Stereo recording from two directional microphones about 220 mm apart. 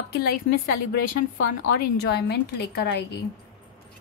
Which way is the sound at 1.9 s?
50° left (ahead or behind).